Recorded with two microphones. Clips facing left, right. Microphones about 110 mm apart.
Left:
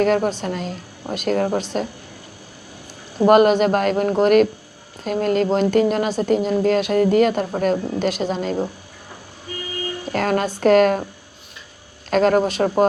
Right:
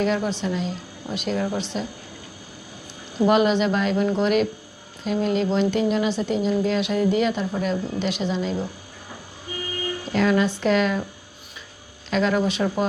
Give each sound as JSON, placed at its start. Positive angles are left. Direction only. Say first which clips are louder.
{"t": 0.0, "sound": "speech", "louder": "left 5 dB", "side_deg": 50}
{"t": 3.2, "sound": "speech", "louder": "left 6 dB", "side_deg": 50}
{"t": 10.1, "sound": "speech", "louder": "even", "side_deg": 50}
{"t": 12.1, "sound": "speech", "louder": "left 5 dB", "side_deg": 45}